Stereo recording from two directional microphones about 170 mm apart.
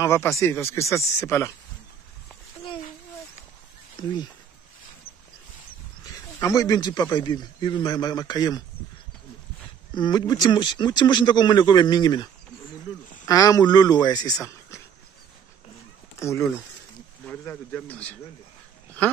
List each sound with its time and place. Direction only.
0.0 s speech: 15° left (ahead or behind)
3.9 s speech: 25° left (ahead or behind)
6.0 s speech: 20° left (ahead or behind)
9.9 s speech: 25° left (ahead or behind)
16.2 s speech: 15° left (ahead or behind)